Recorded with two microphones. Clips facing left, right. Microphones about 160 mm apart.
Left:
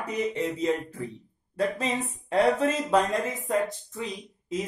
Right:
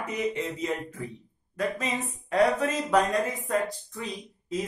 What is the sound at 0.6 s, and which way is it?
Speech, 30° left (ahead or behind).